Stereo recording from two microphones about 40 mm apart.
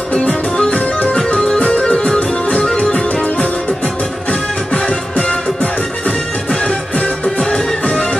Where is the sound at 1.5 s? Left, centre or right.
Left.